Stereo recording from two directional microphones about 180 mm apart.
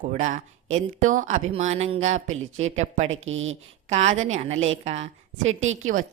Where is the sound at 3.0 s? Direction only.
90° right.